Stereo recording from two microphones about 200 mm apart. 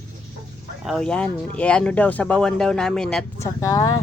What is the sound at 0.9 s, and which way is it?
Speech, 5° left (ahead or behind).